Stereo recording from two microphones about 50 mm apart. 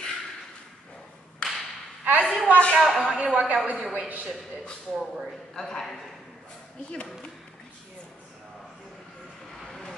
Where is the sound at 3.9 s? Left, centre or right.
Right.